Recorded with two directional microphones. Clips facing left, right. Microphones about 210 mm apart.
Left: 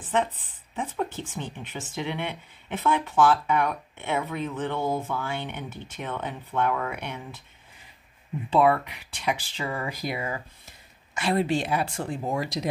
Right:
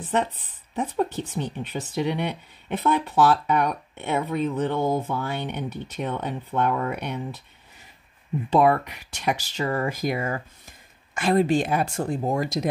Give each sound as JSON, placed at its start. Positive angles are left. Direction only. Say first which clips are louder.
{"t": 0.7, "sound": "speech", "louder": "right 5 dB", "side_deg": -35}
{"t": 8.5, "sound": "speech", "louder": "right 2 dB", "side_deg": -45}